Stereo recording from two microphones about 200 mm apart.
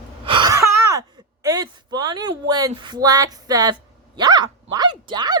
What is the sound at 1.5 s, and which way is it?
Speech, 20° right (ahead or behind).